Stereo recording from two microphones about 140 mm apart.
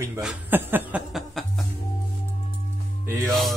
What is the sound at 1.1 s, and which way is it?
Music, centre (ahead or behind).